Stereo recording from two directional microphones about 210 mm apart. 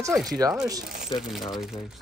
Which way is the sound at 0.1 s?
Centre (ahead or behind).